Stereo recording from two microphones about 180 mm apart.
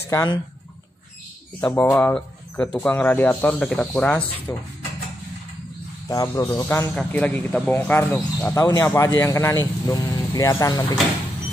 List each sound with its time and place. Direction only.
0.1 s speech: 20° left (ahead or behind)
1.6 s speech: 10° left (ahead or behind)
6.0 s speech: 15° left (ahead or behind)